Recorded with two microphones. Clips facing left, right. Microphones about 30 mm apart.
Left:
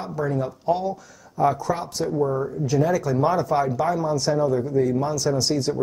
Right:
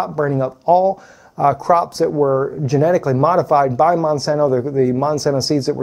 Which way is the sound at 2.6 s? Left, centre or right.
Right.